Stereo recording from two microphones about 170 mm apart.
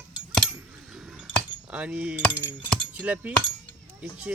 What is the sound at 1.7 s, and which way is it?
Speech, 5° right (ahead or behind).